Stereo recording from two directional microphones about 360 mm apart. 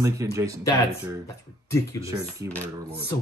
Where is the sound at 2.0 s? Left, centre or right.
Centre.